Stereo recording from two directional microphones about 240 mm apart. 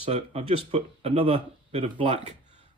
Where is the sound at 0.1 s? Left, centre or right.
Right.